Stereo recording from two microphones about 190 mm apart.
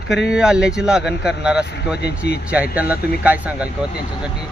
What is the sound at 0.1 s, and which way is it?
Speech, centre (ahead or behind).